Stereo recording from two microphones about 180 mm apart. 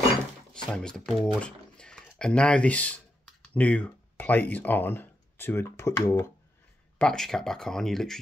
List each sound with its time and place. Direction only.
0.5 s speech: 5° left (ahead or behind)
7.0 s speech: 5° left (ahead or behind)